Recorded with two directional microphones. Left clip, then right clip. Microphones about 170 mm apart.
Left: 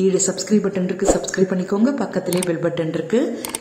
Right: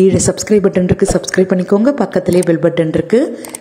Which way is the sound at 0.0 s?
35° right (ahead or behind).